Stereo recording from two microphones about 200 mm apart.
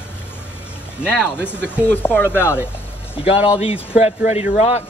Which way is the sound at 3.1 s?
30° left (ahead or behind).